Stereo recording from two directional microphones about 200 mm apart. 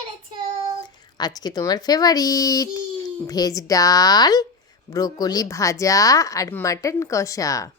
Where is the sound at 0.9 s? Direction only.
20° left (ahead or behind).